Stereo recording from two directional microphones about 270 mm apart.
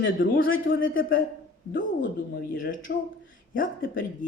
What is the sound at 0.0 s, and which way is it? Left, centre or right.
A man's voice, left.